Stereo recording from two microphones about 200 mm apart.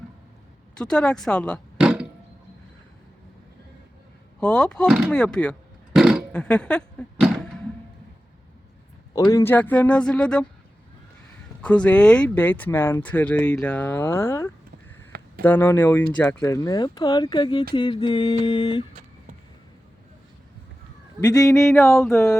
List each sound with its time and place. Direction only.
0.8 s speech: 5° left (ahead or behind)
4.4 s speech: 5° left (ahead or behind)
4.9 s speech: 5° right (ahead or behind)
5.1 s burping: 5° left (ahead or behind)
9.1 s speech: 15° left (ahead or behind)
11.6 s speech: 5° left (ahead or behind)
15.1 s a sound: 50° right (ahead or behind)
15.4 s speech: 10° left (ahead or behind)
21.2 s speech: 20° left (ahead or behind)